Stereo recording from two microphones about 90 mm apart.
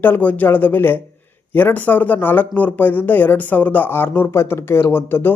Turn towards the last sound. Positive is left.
turn(degrees=25)  # may be behind; listen again after turning